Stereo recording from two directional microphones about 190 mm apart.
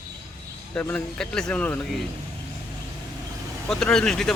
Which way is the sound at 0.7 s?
10° left (ahead or behind).